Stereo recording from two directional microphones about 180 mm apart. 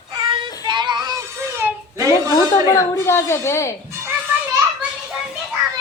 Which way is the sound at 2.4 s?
15° left (ahead or behind).